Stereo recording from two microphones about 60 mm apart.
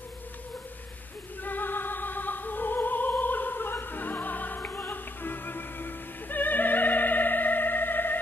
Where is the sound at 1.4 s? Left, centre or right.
Left.